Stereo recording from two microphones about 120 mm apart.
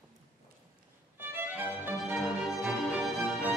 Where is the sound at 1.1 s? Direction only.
15° right (ahead or behind).